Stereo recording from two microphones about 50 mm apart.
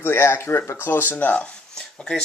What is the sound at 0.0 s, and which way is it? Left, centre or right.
Speech, left.